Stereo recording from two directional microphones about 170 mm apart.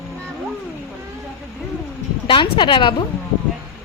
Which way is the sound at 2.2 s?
30° left (ahead or behind).